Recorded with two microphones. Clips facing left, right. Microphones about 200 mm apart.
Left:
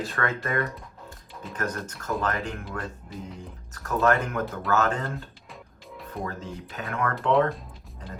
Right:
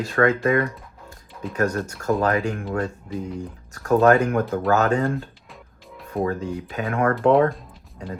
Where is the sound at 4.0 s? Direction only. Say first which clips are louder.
Right 6 dB; 40° right (ahead or behind).